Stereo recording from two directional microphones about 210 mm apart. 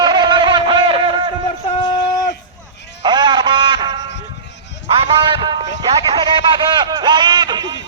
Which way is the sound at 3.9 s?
55° left (ahead or behind).